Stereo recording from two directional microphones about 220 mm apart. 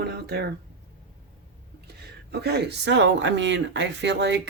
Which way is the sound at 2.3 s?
50° right (ahead or behind).